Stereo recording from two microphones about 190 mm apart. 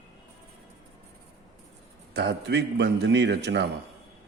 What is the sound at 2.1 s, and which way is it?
A man's voice, 65° right (ahead or behind).